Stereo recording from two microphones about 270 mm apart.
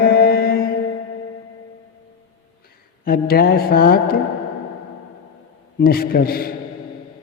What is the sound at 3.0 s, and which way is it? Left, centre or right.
Speech, left.